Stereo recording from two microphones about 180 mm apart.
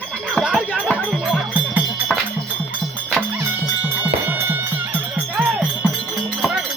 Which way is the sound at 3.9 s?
10° right (ahead or behind).